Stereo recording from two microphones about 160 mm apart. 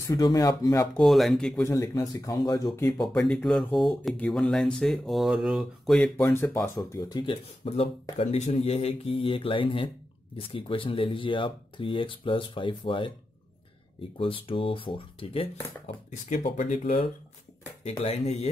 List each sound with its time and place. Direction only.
0.1 s speech: 25° left (ahead or behind)
0.9 s speech: centre (ahead or behind)
1.6 s speech: 20° left (ahead or behind)
3.0 s speech: 5° left (ahead or behind)
6.3 s speech: 15° left (ahead or behind)
6.8 s speech: 25° left (ahead or behind)
14.1 s speech: 35° left (ahead or behind)
16.4 s speech: 45° left (ahead or behind)